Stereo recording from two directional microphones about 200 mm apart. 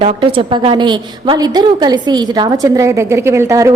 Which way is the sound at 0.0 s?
25° right (ahead or behind).